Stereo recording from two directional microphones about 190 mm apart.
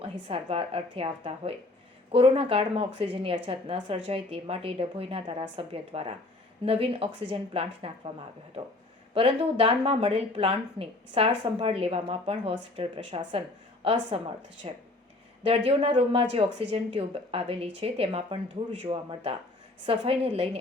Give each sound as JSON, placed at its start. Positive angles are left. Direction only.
{"t": 0.0, "sound": "a woman's voice", "side_deg": -30}
{"t": 9.1, "sound": "a woman's voice", "side_deg": -30}